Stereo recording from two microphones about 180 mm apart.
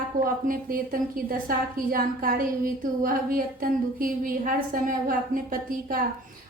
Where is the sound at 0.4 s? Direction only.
50° right (ahead or behind).